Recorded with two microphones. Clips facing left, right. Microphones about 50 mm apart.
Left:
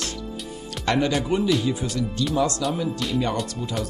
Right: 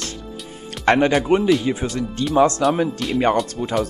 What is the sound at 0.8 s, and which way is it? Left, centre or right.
Speech, right.